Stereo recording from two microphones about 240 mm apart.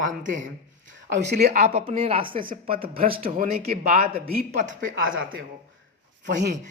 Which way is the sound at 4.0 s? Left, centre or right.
Right.